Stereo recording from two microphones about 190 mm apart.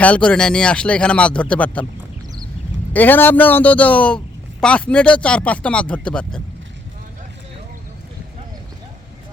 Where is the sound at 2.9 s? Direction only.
10° left (ahead or behind).